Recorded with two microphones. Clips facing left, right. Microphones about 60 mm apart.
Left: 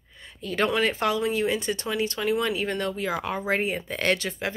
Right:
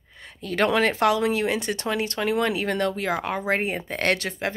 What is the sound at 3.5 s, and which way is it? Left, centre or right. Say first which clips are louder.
Speech: even; right.